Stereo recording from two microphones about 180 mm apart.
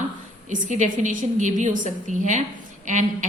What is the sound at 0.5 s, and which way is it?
A woman's voice, 45° right (ahead or behind).